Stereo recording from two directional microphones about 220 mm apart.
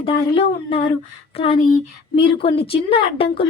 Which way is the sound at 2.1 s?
25° left (ahead or behind).